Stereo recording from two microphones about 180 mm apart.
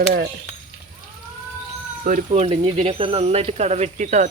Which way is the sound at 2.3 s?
35° right (ahead or behind).